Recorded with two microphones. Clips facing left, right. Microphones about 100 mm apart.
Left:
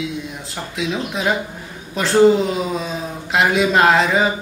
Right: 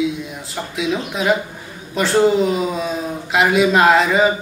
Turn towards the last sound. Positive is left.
turn(degrees=0)  # may be behind; listen again after turning